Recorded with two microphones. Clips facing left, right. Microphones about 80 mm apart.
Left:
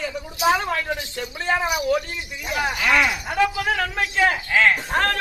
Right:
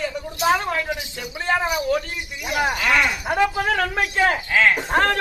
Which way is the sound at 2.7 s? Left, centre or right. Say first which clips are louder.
Left 3 dB; centre.